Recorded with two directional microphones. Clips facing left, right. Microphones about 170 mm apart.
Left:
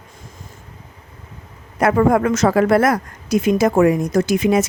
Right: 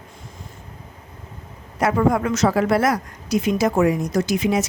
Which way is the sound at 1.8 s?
55° left (ahead or behind).